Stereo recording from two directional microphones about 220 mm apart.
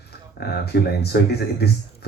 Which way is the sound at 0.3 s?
45° left (ahead or behind).